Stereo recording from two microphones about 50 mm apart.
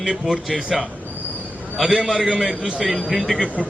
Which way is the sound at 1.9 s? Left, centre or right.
Centre.